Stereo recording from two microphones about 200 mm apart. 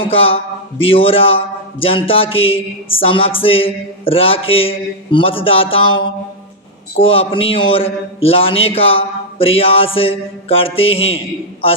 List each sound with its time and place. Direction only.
0.0 s a man's voice: 30° left (ahead or behind)
7.0 s a man's voice: 25° left (ahead or behind)